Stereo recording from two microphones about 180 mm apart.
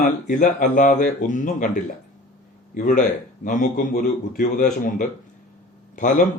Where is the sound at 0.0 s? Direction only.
45° left (ahead or behind).